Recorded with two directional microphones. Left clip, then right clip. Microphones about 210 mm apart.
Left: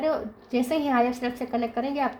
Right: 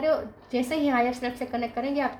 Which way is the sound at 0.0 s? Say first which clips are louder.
Right 1 dB; 35° left (ahead or behind).